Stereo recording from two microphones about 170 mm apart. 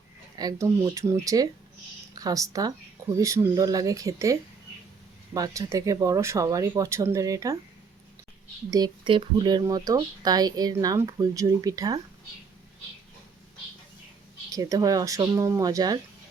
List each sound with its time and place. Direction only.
0.3 s speech: 25° right (ahead or behind)
8.7 s speech: 25° right (ahead or behind)
14.5 s speech: 20° right (ahead or behind)